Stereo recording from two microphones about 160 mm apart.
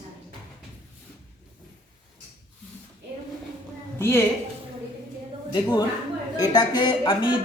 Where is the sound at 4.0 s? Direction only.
15° left (ahead or behind).